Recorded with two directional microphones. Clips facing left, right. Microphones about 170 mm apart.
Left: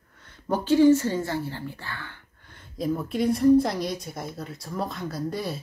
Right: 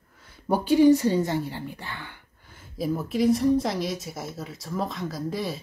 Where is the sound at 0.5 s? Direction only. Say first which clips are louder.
Even; 15° right (ahead or behind).